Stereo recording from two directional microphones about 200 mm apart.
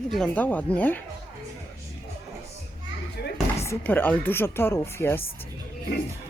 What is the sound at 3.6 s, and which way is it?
Speech, 10° left (ahead or behind).